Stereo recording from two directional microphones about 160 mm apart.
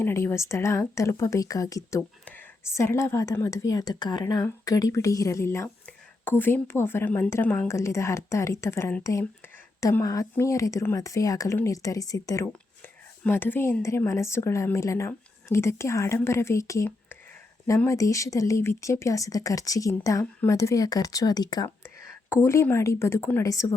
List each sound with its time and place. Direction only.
0.0 s speech: 15° left (ahead or behind)